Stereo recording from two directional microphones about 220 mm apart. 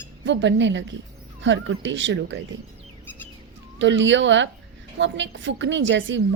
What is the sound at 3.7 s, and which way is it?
Speech, 55° right (ahead or behind).